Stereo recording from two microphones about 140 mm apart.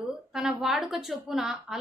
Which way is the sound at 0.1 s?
5° right (ahead or behind).